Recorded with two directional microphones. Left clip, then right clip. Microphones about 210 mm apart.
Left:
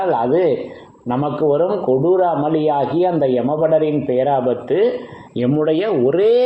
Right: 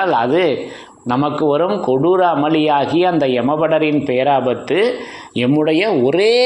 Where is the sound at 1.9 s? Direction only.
40° right (ahead or behind); by 6.3 s 55° right (ahead or behind).